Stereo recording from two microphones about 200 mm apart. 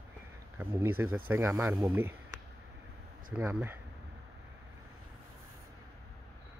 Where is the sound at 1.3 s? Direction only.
10° right (ahead or behind).